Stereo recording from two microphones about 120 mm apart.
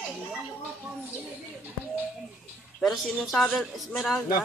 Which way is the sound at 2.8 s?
Centre (ahead or behind).